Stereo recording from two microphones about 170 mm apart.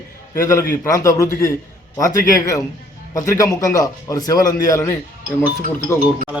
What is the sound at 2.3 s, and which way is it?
A man's voice, 20° left (ahead or behind).